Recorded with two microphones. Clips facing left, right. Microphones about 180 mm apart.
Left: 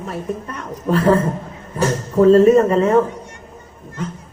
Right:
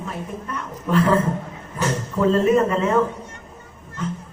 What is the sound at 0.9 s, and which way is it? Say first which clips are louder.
A woman's voice: left 3 dB; 35° left (ahead or behind).